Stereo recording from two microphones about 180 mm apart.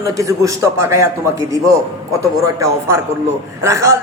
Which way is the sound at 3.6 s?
15° right (ahead or behind).